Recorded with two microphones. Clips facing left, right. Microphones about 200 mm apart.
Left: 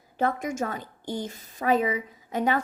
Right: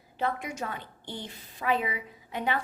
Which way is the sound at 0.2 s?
45° left (ahead or behind).